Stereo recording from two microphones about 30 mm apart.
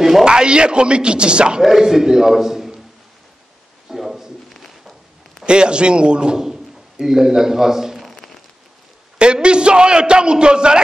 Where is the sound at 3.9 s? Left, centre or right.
Centre.